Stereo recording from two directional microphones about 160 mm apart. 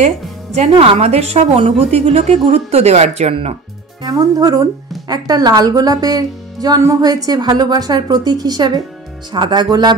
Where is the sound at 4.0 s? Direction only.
25° right (ahead or behind).